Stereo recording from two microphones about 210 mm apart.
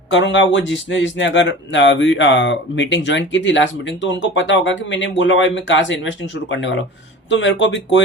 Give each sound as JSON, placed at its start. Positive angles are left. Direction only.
{"t": 0.1, "sound": "speech", "side_deg": 60}